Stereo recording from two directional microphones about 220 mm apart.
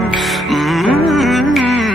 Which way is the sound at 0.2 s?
Centre (ahead or behind).